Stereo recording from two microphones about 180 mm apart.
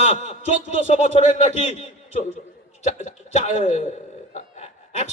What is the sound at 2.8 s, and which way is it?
A man's voice, 40° left (ahead or behind).